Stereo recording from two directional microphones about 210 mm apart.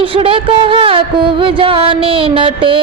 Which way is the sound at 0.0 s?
25° right (ahead or behind).